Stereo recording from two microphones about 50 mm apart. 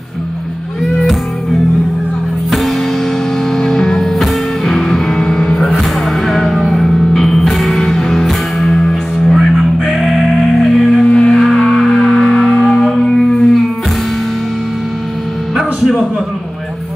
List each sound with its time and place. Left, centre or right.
3.5 s music: centre
11.1 s music: centre
11.5 s a sound: centre